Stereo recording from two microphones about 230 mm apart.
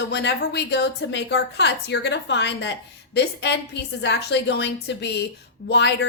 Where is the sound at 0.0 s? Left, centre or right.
Left.